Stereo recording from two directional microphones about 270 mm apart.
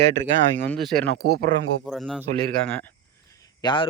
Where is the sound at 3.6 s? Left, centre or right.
Centre.